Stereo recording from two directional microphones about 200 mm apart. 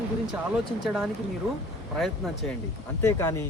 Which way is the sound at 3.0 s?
15° left (ahead or behind).